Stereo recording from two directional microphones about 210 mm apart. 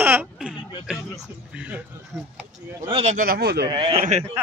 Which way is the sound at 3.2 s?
45° right (ahead or behind).